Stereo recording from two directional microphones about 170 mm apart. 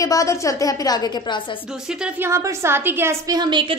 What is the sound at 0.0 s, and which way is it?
A woman's voice, 20° left (ahead or behind).